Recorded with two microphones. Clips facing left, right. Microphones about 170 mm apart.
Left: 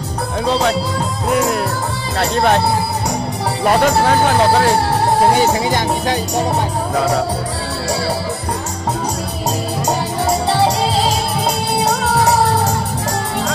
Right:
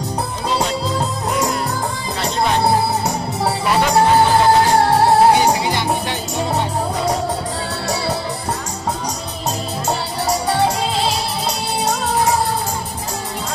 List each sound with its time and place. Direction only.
3.6 s music: 50° left (ahead or behind)
5.7 s music: 45° left (ahead or behind)